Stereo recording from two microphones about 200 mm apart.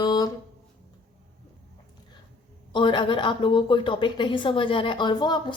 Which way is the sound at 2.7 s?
25° left (ahead or behind).